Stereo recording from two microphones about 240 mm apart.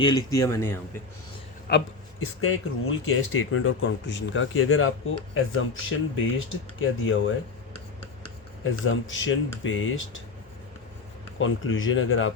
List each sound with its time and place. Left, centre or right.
0.0 s speech: centre
1.7 s speech: left
2.2 s speech: left
6.7 s speech: left
8.6 s speech: left
11.3 s speech: left